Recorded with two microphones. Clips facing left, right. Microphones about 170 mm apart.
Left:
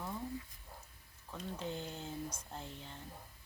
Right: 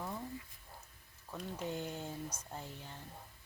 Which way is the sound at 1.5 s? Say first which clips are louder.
Right 2 dB; 10° right (ahead or behind).